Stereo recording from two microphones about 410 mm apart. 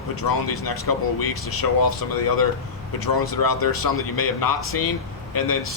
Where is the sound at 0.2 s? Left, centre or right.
Left.